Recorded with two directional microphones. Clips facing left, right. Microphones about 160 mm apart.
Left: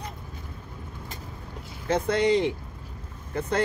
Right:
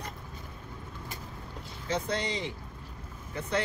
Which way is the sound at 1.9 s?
55° left (ahead or behind).